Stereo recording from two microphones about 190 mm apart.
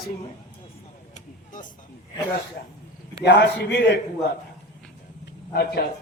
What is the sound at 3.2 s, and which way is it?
Speech, 65° left (ahead or behind).